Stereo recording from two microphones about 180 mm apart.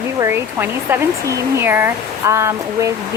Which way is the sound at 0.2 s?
15° right (ahead or behind).